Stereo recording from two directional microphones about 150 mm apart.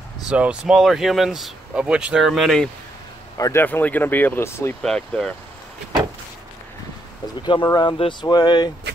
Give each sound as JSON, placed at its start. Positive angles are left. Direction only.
{"t": 0.3, "sound": "speech", "side_deg": -5}
{"t": 3.3, "sound": "a man's voice", "side_deg": 25}
{"t": 3.6, "sound": "speech", "side_deg": 10}
{"t": 4.8, "sound": "speech", "side_deg": 5}
{"t": 7.4, "sound": "speech", "side_deg": 30}